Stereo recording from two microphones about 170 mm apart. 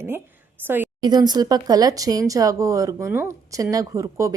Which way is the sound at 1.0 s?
25° right (ahead or behind).